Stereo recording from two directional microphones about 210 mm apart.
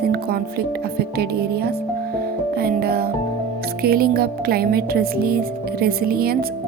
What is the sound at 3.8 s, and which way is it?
Speech, 45° right (ahead or behind).